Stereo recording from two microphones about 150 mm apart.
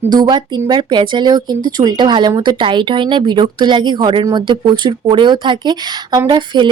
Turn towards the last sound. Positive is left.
turn(degrees=-30)  # may be behind; listen again after turning